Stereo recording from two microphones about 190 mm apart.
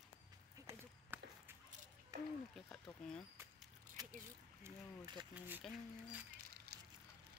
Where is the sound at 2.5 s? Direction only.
Centre (ahead or behind).